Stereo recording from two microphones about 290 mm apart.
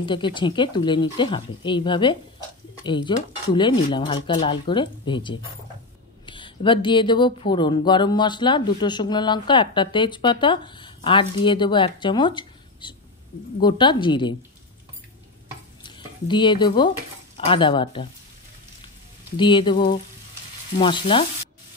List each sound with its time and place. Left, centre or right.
0.0 s speech: centre
15.8 s speech: centre
19.3 s speech: centre